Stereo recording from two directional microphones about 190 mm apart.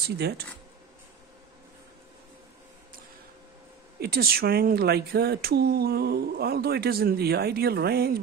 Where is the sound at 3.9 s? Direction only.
55° right (ahead or behind).